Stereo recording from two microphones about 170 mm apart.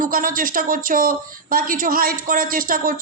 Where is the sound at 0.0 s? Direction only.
55° right (ahead or behind).